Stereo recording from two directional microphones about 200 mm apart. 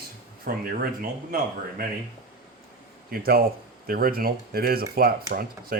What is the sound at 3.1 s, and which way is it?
Speech, 50° right (ahead or behind).